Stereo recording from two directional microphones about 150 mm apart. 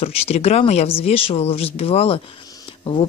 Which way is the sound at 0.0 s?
40° left (ahead or behind).